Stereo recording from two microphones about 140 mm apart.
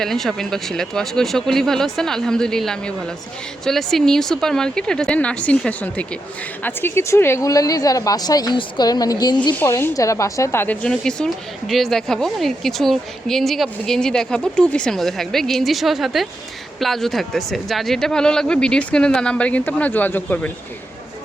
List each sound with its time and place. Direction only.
0.0 s a woman's voice: 5° left (ahead or behind); by 9.6 s 30° left (ahead or behind)
9.6 s speech: 20° left (ahead or behind)